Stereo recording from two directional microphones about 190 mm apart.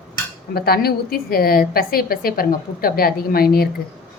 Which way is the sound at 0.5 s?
55° left (ahead or behind).